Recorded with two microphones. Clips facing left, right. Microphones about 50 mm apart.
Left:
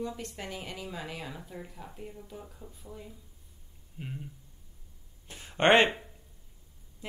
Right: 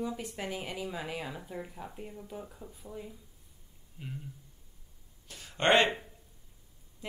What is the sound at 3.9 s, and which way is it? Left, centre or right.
Speech, centre.